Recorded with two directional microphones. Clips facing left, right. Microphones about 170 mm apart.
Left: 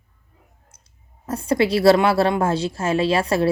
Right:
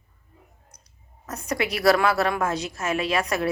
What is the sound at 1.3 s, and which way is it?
A woman's voice, 30° left (ahead or behind).